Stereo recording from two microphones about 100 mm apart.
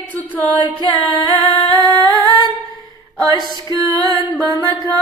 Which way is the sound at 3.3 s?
45° left (ahead or behind).